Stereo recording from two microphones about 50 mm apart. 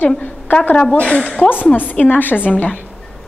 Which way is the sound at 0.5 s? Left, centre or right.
Left.